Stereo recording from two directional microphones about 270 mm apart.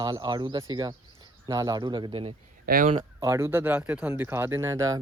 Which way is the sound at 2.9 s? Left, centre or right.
Centre.